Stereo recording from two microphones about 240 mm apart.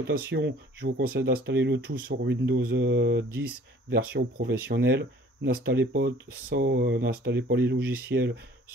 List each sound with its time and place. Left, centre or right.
0.0 s speech: right